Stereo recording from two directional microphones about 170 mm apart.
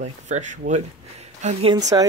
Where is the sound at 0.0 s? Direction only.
45° right (ahead or behind).